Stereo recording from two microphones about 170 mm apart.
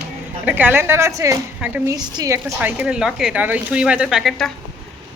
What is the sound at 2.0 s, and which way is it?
Speech, 20° right (ahead or behind).